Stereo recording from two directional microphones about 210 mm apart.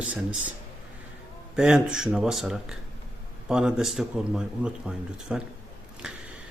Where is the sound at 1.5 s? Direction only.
5° right (ahead or behind).